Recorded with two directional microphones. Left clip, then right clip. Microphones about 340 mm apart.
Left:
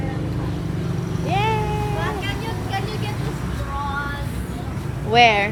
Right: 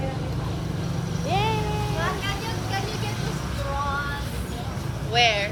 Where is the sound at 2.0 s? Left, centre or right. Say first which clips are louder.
Left 2 dB; centre.